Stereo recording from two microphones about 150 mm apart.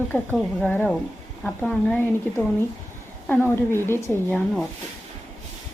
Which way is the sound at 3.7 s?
15° left (ahead or behind).